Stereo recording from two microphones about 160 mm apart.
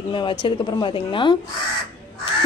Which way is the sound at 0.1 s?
30° left (ahead or behind).